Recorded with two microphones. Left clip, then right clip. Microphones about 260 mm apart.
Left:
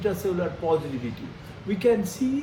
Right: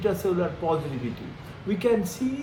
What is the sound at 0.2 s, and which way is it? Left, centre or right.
Speech, right.